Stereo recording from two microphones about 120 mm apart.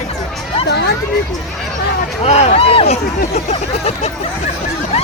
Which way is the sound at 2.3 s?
60° left (ahead or behind).